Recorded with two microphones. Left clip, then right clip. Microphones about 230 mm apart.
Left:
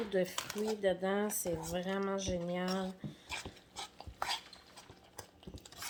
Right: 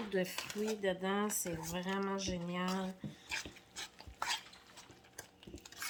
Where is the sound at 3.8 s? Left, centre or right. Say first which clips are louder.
Left 2 dB; centre.